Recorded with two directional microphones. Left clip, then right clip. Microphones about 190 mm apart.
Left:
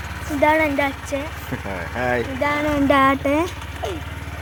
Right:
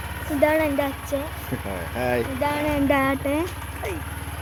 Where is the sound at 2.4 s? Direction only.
20° left (ahead or behind).